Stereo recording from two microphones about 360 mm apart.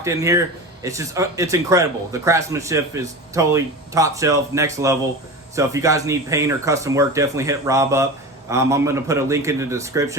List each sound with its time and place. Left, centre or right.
0.0 s speech: centre